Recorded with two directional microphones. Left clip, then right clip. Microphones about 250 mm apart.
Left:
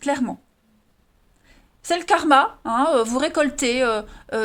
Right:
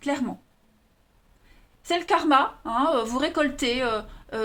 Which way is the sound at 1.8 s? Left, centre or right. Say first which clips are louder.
Left 4 dB; left.